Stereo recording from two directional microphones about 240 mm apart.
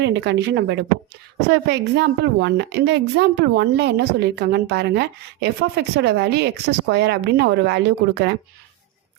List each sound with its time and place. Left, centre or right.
0.0 s a woman's voice: right